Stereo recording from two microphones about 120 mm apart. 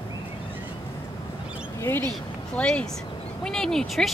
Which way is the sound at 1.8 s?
20° left (ahead or behind).